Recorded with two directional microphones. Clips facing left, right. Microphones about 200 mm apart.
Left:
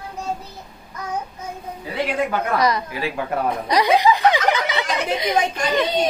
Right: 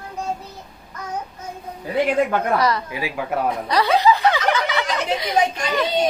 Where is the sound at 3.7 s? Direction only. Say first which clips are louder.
Left 1 dB; 15° left (ahead or behind).